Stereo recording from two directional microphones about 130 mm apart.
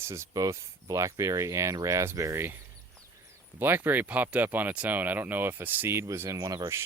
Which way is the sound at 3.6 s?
15° right (ahead or behind).